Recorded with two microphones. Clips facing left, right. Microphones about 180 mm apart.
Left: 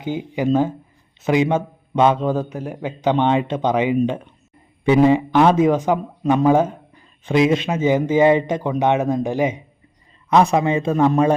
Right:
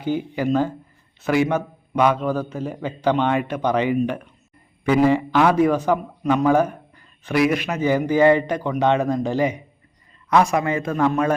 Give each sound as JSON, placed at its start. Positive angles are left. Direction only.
{"t": 0.0, "sound": "a man's voice", "side_deg": 20}